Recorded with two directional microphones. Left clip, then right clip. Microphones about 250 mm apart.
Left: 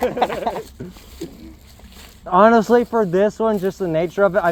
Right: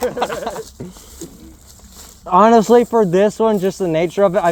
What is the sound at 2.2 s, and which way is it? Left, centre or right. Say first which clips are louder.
Speech: right 2 dB; right.